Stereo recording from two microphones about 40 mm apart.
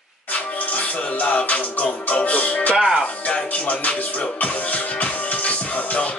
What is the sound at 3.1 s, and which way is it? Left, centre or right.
Music, left.